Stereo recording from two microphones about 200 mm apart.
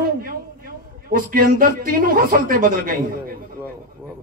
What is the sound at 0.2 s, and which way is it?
Speech, 45° right (ahead or behind).